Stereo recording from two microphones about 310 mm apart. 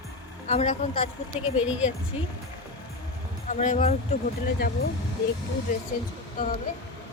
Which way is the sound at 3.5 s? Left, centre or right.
Left.